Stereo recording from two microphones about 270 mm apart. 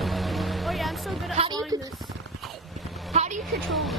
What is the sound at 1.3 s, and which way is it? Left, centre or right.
Speech, right.